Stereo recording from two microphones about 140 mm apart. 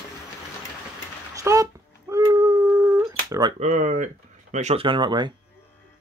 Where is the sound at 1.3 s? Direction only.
25° right (ahead or behind).